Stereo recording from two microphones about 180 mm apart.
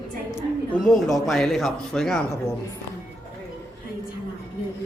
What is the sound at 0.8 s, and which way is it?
A man's voice, centre (ahead or behind).